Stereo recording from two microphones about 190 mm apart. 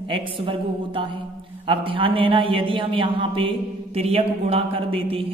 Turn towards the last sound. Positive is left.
turn(degrees=-30)  # may be behind; listen again after turning